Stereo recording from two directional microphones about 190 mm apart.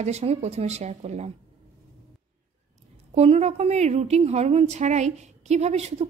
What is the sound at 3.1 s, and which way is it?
A woman's voice, 35° right (ahead or behind).